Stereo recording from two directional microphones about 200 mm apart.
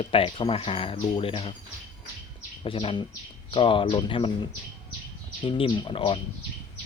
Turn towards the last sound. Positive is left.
turn(degrees=25)  # may be behind; listen again after turning